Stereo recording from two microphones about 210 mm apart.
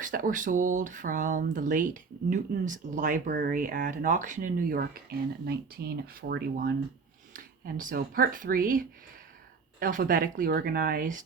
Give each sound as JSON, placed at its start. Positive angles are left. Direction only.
{"t": 0.0, "sound": "speech", "side_deg": -40}